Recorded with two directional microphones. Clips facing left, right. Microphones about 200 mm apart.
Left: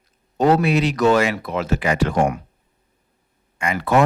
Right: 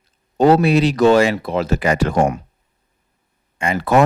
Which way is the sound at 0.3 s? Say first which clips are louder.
Right 4 dB; 30° right (ahead or behind).